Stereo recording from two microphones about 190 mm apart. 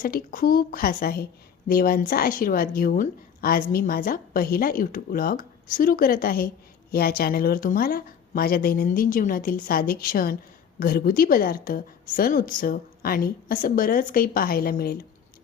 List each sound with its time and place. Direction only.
0.0 s a woman's voice: 50° left (ahead or behind)